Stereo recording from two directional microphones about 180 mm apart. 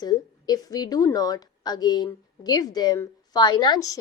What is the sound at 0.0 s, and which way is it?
A woman's voice, 20° left (ahead or behind).